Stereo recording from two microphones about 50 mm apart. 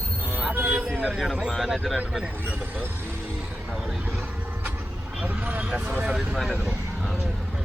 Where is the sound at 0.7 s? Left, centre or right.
Right.